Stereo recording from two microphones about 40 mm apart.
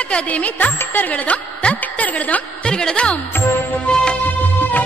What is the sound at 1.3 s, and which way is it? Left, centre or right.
A woman's voice, left.